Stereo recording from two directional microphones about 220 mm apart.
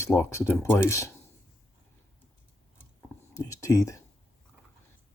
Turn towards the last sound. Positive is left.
turn(degrees=15)  # may be behind; listen again after turning